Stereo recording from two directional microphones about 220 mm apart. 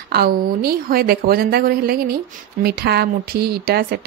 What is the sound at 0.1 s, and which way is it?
Speech, 45° right (ahead or behind).